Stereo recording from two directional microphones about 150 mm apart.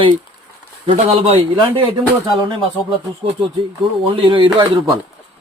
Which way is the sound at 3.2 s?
40° right (ahead or behind).